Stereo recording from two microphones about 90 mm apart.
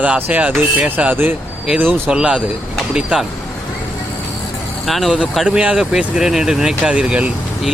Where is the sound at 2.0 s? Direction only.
10° right (ahead or behind).